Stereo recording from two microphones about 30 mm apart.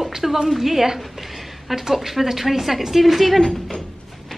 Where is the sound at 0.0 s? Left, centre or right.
Centre.